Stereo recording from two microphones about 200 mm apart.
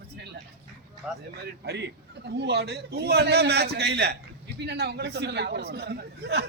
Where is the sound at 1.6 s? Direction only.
55° right (ahead or behind).